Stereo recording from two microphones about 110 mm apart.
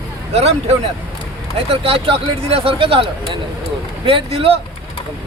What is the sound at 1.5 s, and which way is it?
Speech, 60° right (ahead or behind).